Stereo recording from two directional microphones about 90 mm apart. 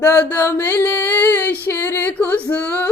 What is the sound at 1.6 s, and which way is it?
Female singing, 25° left (ahead or behind).